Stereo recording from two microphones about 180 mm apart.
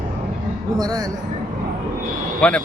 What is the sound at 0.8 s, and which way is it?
Speech, 20° right (ahead or behind).